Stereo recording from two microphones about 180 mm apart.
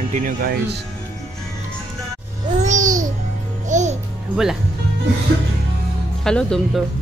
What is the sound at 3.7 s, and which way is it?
Music, 40° right (ahead or behind).